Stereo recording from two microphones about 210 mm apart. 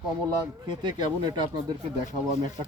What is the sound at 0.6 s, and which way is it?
Speech, 20° right (ahead or behind).